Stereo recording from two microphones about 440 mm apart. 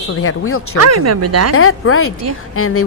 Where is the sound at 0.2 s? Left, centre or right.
Left.